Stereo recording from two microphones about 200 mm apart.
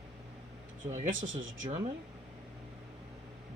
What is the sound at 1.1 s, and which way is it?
Speech, 75° right (ahead or behind).